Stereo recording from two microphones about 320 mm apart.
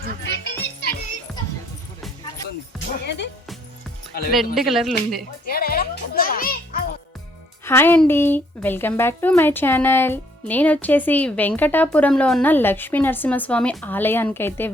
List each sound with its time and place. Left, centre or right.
0.2 s music: left
1.3 s a sound: centre
2.7 s music: centre
4.5 s speech: centre
5.5 s music: left
7.6 s speech: centre